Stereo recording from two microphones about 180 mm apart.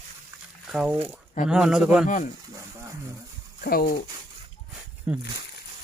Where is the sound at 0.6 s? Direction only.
10° right (ahead or behind).